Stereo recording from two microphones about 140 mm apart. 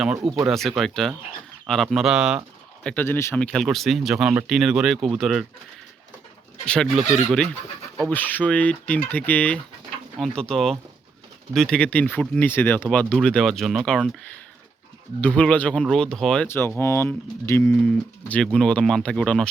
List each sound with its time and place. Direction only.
0.4 s speech: centre (ahead or behind)
2.8 s speech: 15° left (ahead or behind)
3.3 s speech: 5° left (ahead or behind)
6.7 s speech: 5° left (ahead or behind)
15.2 s speech: 10° left (ahead or behind)
16.5 s speech: 15° left (ahead or behind)
18.5 s speech: 5° left (ahead or behind)